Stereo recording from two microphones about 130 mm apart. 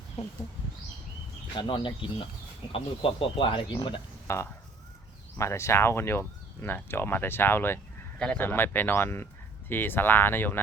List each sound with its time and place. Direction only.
1.5 s speech: 35° left (ahead or behind)
4.3 s speech: 25° left (ahead or behind)